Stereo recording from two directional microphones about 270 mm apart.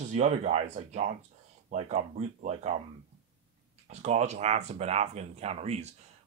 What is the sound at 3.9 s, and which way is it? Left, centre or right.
Speech, right.